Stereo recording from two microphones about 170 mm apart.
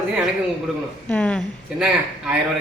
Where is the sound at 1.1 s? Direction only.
10° left (ahead or behind).